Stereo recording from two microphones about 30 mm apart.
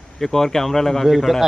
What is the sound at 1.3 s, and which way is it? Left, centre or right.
Speech, centre.